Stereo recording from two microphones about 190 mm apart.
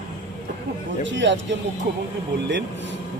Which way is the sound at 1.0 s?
75° right (ahead or behind).